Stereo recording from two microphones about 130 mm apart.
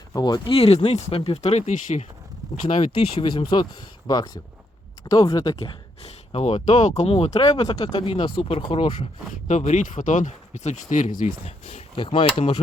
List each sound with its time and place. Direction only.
0.1 s speech: 30° left (ahead or behind); by 1.7 s 55° left (ahead or behind)
1.7 s speech: 70° left (ahead or behind)
2.6 s speech: 50° left (ahead or behind); by 5.5 s 25° left (ahead or behind)
5.5 s speech: 50° left (ahead or behind)
6.8 s speech: 65° left (ahead or behind)
7.4 s speech: 35° left (ahead or behind)
9.3 s speech: 65° left (ahead or behind)
11.4 s speech: 60° left (ahead or behind)
11.9 s speech: 45° left (ahead or behind)